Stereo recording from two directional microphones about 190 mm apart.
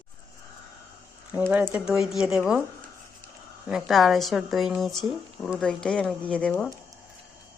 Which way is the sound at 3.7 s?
Centre (ahead or behind).